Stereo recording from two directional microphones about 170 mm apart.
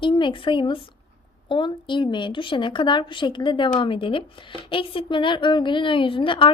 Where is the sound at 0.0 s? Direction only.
30° left (ahead or behind).